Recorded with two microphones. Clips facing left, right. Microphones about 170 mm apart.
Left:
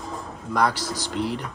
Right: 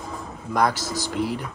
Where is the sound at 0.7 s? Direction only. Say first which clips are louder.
Right 1 dB; 45° right (ahead or behind).